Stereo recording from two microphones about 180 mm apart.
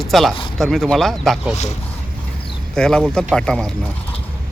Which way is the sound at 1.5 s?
40° left (ahead or behind).